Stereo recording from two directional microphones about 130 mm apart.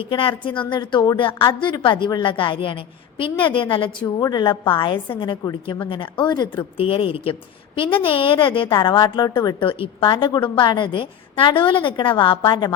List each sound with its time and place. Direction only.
0.0 s a woman's voice: 45° left (ahead or behind)
4.0 s a woman's voice: 30° left (ahead or behind)
6.7 s a woman's voice: 45° left (ahead or behind)
9.6 s a woman's voice: 40° left (ahead or behind)